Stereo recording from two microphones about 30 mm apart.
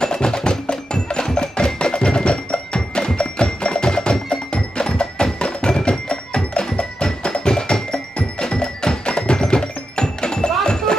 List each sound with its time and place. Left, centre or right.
0.0 s wood block: left